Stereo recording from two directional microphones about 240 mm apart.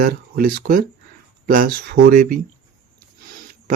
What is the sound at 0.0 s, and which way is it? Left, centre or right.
Speech, right.